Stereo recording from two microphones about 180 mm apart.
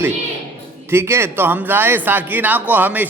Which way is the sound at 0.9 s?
15° right (ahead or behind).